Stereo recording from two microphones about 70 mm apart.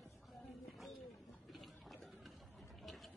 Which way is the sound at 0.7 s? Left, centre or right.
Centre.